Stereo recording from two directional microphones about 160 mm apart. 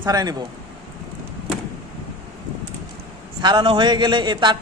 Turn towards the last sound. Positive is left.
turn(degrees=-30)  # may be behind; listen again after turning